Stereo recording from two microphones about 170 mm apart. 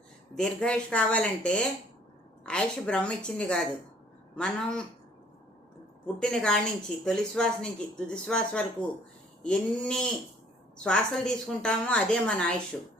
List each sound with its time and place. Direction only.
0.3 s speech: 5° left (ahead or behind)
6.1 s speech: 5° left (ahead or behind)